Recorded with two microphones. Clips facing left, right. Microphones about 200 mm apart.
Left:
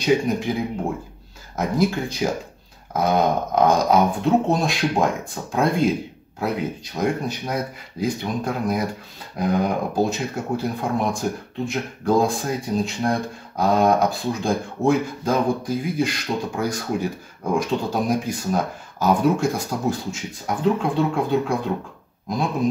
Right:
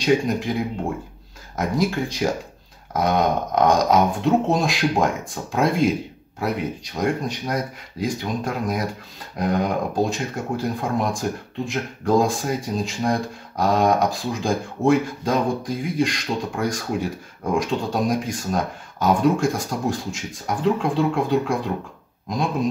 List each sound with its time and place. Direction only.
0.0 s speech: centre (ahead or behind)